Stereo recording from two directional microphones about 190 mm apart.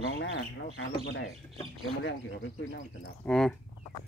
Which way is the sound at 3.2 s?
5° left (ahead or behind).